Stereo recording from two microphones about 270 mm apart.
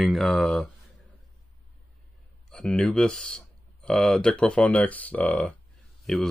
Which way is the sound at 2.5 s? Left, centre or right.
Centre.